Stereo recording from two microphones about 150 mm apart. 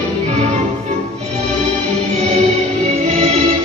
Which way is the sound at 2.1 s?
45° right (ahead or behind).